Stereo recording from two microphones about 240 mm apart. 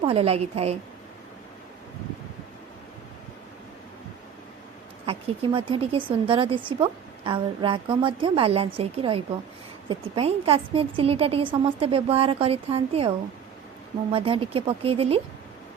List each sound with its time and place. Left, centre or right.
0.0 s a woman's voice: right
5.0 s a woman's voice: right